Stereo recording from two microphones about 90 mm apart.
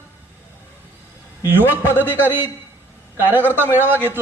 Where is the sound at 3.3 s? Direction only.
25° right (ahead or behind).